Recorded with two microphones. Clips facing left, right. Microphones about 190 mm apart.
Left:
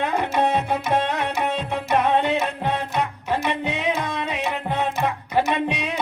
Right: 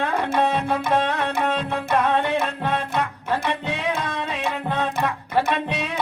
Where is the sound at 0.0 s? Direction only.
20° left (ahead or behind).